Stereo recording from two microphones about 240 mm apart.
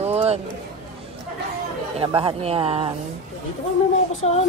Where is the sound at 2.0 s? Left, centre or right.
Right.